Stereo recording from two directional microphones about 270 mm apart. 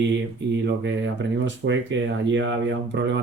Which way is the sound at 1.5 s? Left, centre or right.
Right.